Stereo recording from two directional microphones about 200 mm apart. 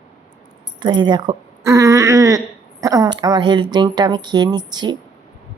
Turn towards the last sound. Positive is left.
turn(degrees=-20)  # may be behind; listen again after turning